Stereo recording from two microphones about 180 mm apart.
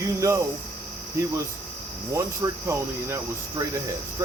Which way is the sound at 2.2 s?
15° right (ahead or behind).